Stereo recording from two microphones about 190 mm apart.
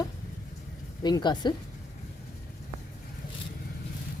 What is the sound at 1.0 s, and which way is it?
Speech, 25° left (ahead or behind).